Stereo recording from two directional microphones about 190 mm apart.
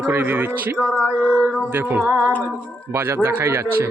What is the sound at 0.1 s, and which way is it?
Speech, 10° right (ahead or behind).